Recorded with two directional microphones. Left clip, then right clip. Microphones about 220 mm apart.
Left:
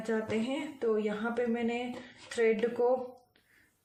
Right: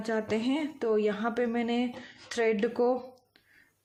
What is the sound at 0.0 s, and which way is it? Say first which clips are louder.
Speech: right 3 dB; 50° right (ahead or behind).